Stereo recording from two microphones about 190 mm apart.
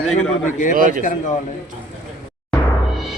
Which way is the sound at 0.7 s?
45° right (ahead or behind).